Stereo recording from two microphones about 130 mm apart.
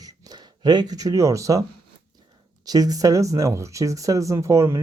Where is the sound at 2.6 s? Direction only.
30° right (ahead or behind).